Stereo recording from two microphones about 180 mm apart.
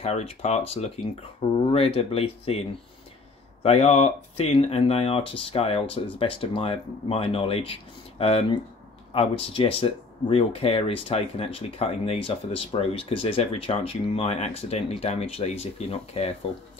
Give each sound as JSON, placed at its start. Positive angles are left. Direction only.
{"t": 0.0, "sound": "speech", "side_deg": 35}
{"t": 3.6, "sound": "speech", "side_deg": 35}